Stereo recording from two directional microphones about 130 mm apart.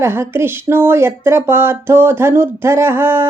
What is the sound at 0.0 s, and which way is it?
Speech, 20° right (ahead or behind).